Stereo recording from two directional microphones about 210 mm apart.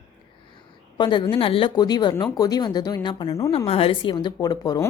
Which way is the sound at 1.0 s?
20° left (ahead or behind).